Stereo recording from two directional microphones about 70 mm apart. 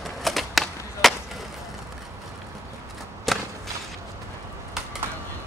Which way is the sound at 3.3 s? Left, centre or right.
Centre.